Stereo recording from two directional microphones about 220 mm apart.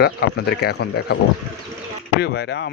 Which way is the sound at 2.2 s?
50° left (ahead or behind).